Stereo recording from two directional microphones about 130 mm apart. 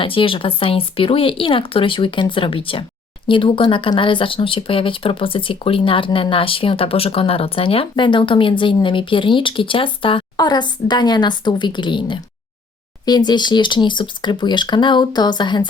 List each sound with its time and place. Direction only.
0.0 s speech: 45° left (ahead or behind)